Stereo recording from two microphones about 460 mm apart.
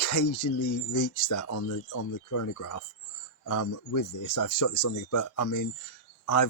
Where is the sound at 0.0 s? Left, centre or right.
Left.